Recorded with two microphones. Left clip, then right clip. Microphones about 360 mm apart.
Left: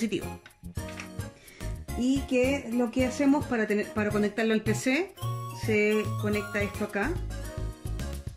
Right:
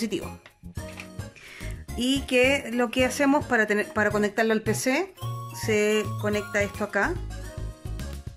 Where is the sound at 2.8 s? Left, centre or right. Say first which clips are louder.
Right 3 dB; right.